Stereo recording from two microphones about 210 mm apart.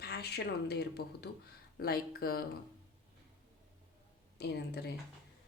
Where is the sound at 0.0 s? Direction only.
50° left (ahead or behind).